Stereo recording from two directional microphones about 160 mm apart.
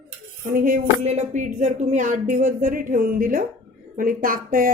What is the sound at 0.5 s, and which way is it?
Speech, 60° right (ahead or behind).